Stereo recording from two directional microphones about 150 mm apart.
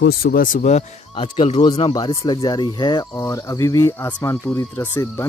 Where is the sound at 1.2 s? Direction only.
35° left (ahead or behind).